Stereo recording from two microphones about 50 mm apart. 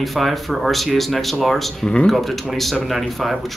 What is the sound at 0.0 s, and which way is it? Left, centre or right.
Speech, centre.